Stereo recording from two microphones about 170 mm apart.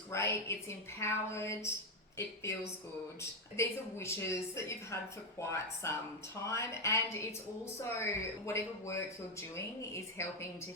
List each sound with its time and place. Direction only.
0.1 s a woman's voice: 15° left (ahead or behind)